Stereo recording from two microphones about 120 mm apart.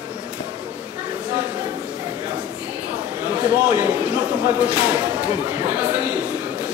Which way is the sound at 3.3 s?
10° right (ahead or behind).